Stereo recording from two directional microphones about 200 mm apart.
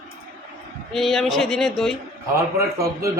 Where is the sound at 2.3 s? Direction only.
15° right (ahead or behind).